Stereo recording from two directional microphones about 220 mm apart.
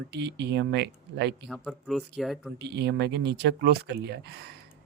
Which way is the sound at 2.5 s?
50° right (ahead or behind).